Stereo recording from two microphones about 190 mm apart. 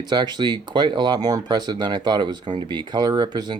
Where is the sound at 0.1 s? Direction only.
25° right (ahead or behind).